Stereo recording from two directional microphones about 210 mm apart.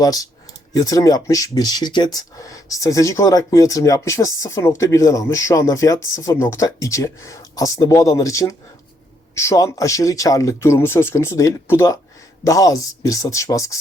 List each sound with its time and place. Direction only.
0.0 s speech: 15° left (ahead or behind)